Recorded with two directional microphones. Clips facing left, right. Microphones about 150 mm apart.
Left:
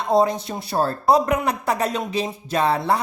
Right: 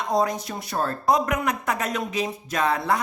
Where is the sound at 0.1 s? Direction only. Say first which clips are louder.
Left 6 dB; 30° left (ahead or behind).